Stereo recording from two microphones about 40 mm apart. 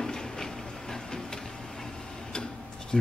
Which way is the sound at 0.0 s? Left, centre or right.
Centre.